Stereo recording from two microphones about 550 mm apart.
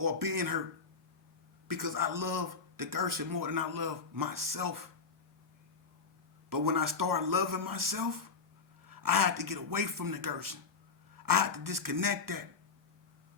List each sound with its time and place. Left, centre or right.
0.0 s a man's voice: right
1.6 s a man's voice: right
6.5 s a man's voice: right